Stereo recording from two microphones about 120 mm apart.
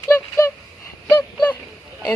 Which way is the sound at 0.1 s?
20° left (ahead or behind).